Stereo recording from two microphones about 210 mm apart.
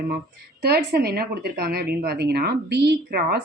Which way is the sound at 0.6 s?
50° right (ahead or behind).